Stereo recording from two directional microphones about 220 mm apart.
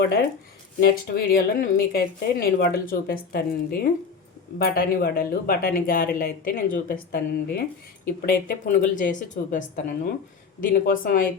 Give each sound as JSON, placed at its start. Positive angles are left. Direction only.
{"t": 0.8, "sound": "speech", "side_deg": 45}